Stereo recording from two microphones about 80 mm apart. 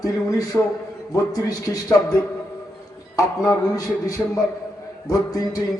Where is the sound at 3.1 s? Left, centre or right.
Left.